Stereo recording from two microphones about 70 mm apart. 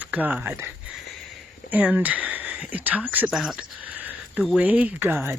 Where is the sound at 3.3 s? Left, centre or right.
Centre.